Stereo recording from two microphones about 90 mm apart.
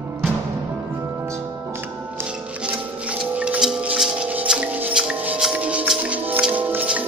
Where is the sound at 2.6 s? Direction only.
15° right (ahead or behind).